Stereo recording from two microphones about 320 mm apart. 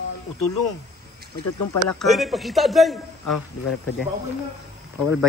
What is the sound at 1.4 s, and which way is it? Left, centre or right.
Speech, left.